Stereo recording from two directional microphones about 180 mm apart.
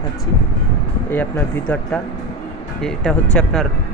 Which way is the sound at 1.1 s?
10° left (ahead or behind).